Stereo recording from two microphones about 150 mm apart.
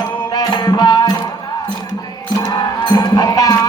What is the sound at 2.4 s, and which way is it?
Music, 25° left (ahead or behind).